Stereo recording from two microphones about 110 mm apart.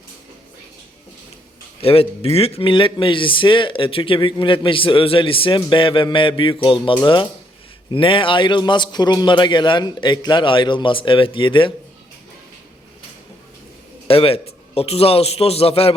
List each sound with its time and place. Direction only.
1.8 s speech: 60° left (ahead or behind)
14.1 s a man's voice: 60° left (ahead or behind)